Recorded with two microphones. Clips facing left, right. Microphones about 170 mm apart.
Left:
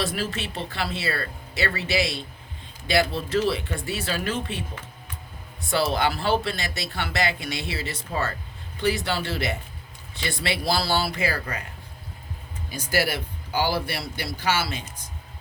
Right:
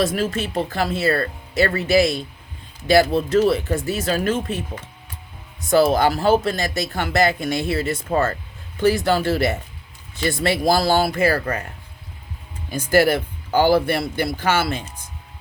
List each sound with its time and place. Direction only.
0.0 s speech: 45° right (ahead or behind)
12.7 s speech: 50° right (ahead or behind)